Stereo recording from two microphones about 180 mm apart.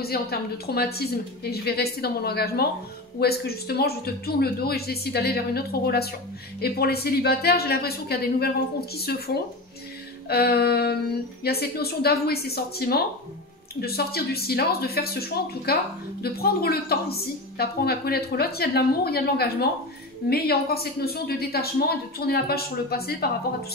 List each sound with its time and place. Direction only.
0.0 s a woman's voice: 60° left (ahead or behind)